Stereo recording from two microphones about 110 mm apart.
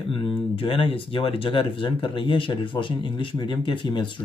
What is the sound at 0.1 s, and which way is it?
Speech, 55° left (ahead or behind).